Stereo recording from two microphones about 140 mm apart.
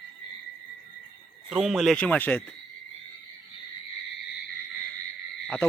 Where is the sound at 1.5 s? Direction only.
5° right (ahead or behind).